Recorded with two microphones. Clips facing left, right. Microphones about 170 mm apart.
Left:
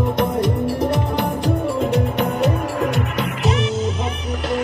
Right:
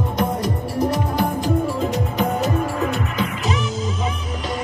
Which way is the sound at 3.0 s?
65° left (ahead or behind).